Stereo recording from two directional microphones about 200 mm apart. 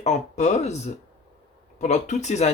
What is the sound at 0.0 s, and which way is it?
Speech, 35° left (ahead or behind).